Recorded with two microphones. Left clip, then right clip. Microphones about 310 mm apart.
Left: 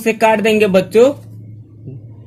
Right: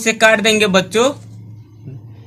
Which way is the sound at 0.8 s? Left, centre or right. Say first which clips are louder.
Left 3 dB; right.